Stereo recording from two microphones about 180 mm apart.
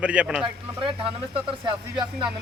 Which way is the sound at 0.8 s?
30° right (ahead or behind).